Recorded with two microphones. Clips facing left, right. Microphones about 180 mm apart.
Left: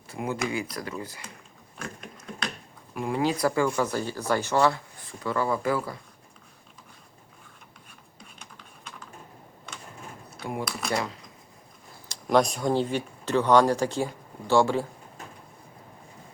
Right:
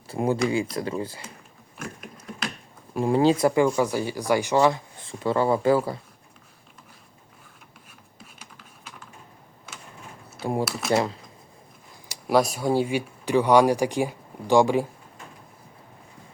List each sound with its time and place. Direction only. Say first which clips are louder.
0.1 s speech: right 6 dB; 30° right (ahead or behind)
1.8 s patter: right 1 dB; 5° right (ahead or behind)
2.9 s speech: right 7 dB; 30° right (ahead or behind)
5.0 s speech: right 5 dB; 30° right (ahead or behind)
8.2 s computer keyboard: right 1 dB; 5° right (ahead or behind)
10.4 s speech: right 6 dB; 30° right (ahead or behind)
10.7 s patter: right 4 dB; 5° right (ahead or behind)
10.9 s speech: right 7 dB; 30° right (ahead or behind)
12.0 s speech: right 1 dB; 10° right (ahead or behind)